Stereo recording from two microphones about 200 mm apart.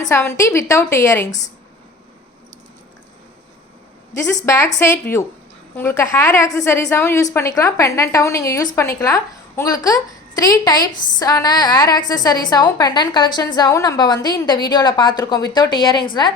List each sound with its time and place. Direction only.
0.0 s a woman's voice: 15° left (ahead or behind)
4.4 s a woman's voice: 15° left (ahead or behind)
5.7 s a woman's voice: 15° left (ahead or behind)